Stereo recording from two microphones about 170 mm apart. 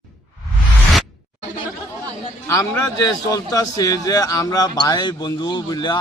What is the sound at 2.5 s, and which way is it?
Speech, 20° left (ahead or behind).